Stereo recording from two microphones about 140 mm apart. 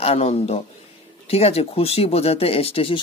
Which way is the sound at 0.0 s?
45° left (ahead or behind).